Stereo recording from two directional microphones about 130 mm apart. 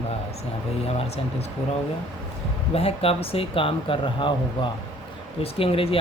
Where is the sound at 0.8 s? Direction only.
50° left (ahead or behind).